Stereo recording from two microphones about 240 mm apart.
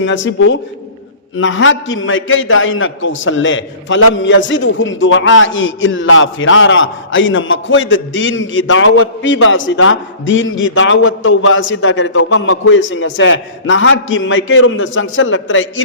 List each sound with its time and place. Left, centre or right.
0.0 s a man's voice: left